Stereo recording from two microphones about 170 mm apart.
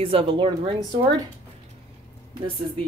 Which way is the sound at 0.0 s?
30° right (ahead or behind).